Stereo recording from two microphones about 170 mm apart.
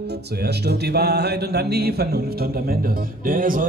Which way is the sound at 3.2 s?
55° right (ahead or behind).